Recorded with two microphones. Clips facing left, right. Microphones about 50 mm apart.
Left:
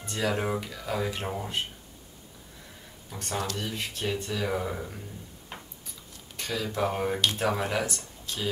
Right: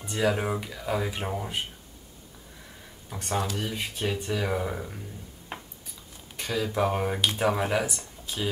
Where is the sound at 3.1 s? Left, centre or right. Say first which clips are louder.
Right 3 dB; centre.